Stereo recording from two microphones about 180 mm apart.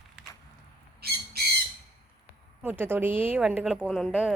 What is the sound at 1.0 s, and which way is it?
Bird, 60° right (ahead or behind).